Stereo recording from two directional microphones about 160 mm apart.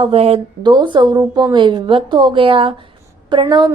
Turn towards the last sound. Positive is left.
turn(degrees=-25)  # may be behind; listen again after turning